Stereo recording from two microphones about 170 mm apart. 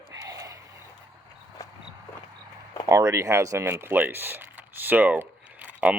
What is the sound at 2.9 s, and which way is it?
Speech, 20° right (ahead or behind).